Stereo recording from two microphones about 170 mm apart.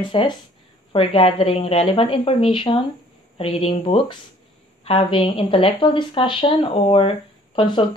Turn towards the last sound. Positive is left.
turn(degrees=25)  # may be behind; listen again after turning